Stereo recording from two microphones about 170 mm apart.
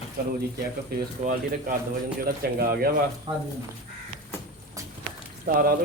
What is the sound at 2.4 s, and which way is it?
Speech, 65° right (ahead or behind).